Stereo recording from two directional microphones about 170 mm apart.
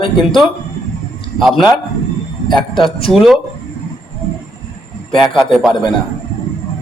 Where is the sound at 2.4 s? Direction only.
30° left (ahead or behind).